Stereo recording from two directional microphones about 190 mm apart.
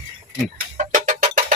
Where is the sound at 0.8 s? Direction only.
40° right (ahead or behind).